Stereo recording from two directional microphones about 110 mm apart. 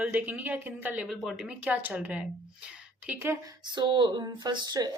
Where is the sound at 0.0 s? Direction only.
15° right (ahead or behind).